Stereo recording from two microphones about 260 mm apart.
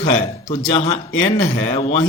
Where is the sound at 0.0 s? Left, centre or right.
Left.